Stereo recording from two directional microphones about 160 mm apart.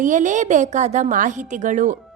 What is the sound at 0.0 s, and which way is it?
A woman's voice, 50° right (ahead or behind).